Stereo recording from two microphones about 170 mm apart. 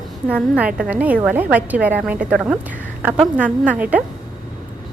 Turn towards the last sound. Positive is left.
turn(degrees=-10)  # may be behind; listen again after turning